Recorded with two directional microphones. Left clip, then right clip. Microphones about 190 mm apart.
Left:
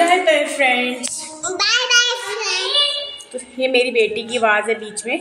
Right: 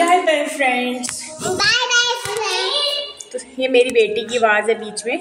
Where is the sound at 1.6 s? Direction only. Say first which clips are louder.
Left 1 dB; 35° right (ahead or behind).